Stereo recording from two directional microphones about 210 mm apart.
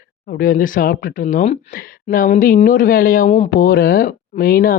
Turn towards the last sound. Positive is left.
turn(degrees=45)  # may be behind; listen again after turning